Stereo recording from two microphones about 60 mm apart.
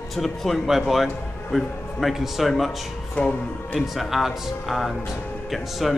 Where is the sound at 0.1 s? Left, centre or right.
Centre.